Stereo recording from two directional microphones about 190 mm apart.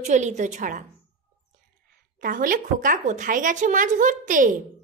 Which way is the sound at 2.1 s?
45° right (ahead or behind).